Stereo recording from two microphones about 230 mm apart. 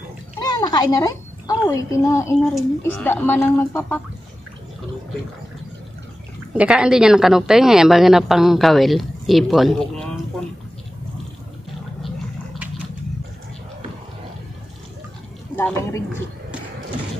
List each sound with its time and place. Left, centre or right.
0.4 s a child's voice: centre
6.5 s a woman's voice: centre
15.5 s a sound: centre